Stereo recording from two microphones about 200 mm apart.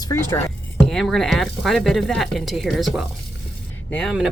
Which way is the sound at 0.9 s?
Centre (ahead or behind).